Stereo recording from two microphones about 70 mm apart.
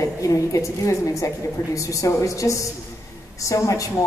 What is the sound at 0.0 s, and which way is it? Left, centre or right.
A woman's voice, left.